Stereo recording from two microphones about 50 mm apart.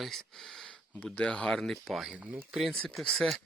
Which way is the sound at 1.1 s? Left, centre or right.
Left.